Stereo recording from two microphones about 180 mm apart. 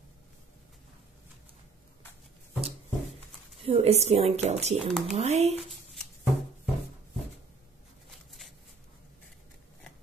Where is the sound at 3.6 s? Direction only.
35° right (ahead or behind).